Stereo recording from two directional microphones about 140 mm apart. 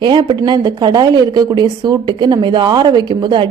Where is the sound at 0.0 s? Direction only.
35° right (ahead or behind).